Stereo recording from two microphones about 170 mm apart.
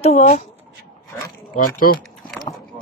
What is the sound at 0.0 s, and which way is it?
Speech, 40° left (ahead or behind).